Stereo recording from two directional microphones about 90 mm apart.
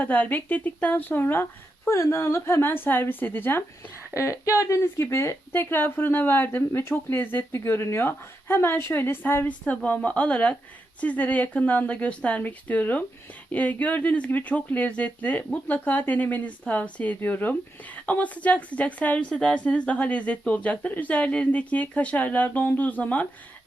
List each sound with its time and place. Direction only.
0.0 s a woman's voice: 20° left (ahead or behind)
4.1 s a woman's voice: 35° left (ahead or behind); by 23.2 s 15° left (ahead or behind)